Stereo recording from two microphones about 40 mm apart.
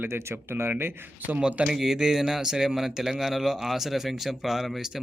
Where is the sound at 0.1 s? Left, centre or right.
Right.